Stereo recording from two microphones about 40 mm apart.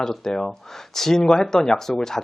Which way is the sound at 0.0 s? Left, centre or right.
Centre.